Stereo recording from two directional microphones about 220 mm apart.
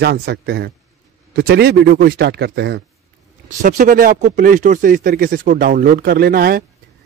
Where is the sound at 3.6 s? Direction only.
40° right (ahead or behind).